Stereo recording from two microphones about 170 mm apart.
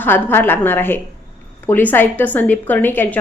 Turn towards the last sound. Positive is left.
turn(degrees=10)  # may be behind; listen again after turning